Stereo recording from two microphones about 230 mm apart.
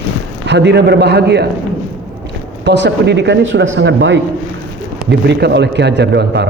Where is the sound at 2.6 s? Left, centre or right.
Right.